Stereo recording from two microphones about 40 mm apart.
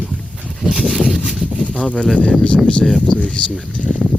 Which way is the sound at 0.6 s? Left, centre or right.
Right.